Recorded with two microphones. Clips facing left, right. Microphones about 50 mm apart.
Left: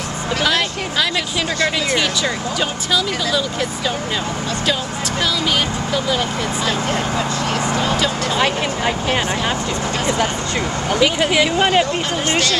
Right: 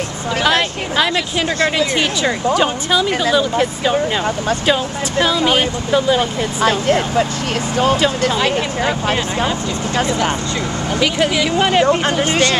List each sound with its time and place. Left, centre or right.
0.4 s a sound: right
1.8 s speech: centre
5.2 s speech: right
6.6 s speech: right
11.2 s speech: left
11.5 s speech: centre
11.8 s speech: right